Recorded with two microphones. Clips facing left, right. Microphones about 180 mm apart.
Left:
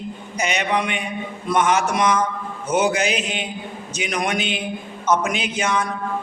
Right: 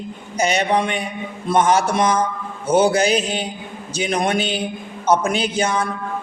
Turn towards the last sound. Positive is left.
turn(degrees=-30)  # may be behind; listen again after turning